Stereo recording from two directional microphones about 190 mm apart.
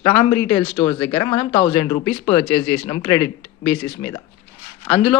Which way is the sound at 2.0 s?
5° left (ahead or behind).